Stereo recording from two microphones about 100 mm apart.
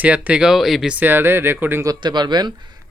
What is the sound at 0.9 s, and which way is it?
Speech, 20° right (ahead or behind).